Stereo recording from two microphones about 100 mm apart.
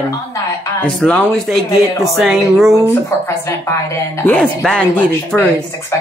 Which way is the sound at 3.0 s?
25° left (ahead or behind).